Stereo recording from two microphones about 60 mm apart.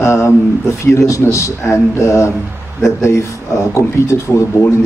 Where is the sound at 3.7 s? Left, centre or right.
Left.